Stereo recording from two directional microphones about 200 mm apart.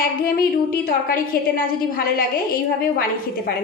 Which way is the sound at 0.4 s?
50° left (ahead or behind).